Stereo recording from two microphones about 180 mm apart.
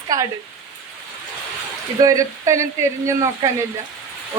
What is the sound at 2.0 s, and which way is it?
Speech, 20° right (ahead or behind).